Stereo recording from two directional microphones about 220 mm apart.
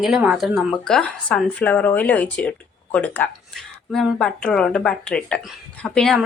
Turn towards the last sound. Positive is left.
turn(degrees=0)  # may be behind; listen again after turning